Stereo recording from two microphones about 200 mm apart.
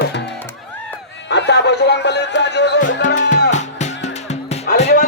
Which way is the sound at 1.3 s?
60° left (ahead or behind).